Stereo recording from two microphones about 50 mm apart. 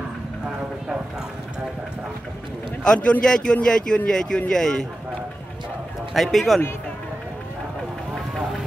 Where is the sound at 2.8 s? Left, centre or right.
Centre.